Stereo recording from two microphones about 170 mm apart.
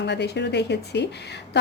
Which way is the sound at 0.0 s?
90° left.